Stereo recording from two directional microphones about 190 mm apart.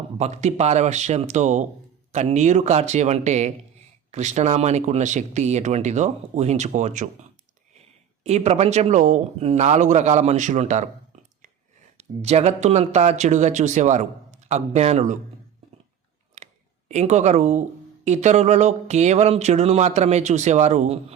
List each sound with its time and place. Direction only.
0.2 s speech: 35° right (ahead or behind)
8.2 s speech: 35° right (ahead or behind)
11.9 s speech: 35° right (ahead or behind)
16.9 s speech: 35° right (ahead or behind)